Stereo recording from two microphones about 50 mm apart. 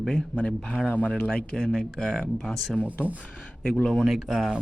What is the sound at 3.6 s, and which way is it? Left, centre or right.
Speech, centre.